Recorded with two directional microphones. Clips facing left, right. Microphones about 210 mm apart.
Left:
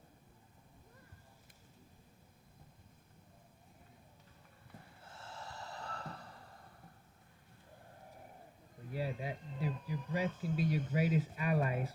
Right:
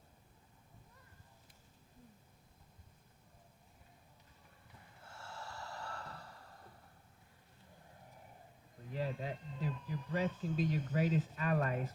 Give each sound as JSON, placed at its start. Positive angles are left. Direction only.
{"t": 5.0, "sound": "snort", "side_deg": 20}
{"t": 8.9, "sound": "a sound", "side_deg": 10}
{"t": 9.8, "sound": "speech", "side_deg": 10}